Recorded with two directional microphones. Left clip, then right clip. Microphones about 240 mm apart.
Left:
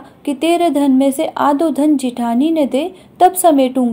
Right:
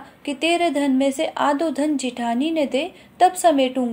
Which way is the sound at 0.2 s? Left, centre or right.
Left.